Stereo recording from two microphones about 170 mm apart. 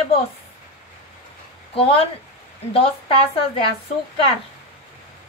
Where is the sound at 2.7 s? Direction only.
35° left (ahead or behind).